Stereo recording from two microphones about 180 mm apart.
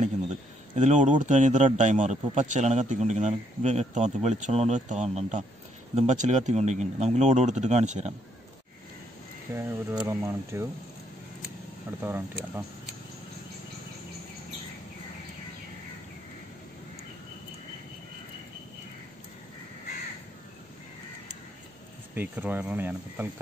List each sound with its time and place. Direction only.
0.7 s a man's voice: 45° right (ahead or behind)
9.6 s speech: 15° right (ahead or behind)
12.0 s speech: 10° right (ahead or behind)
22.1 s speech: 10° right (ahead or behind)